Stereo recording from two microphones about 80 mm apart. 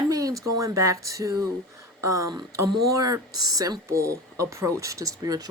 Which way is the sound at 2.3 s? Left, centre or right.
Right.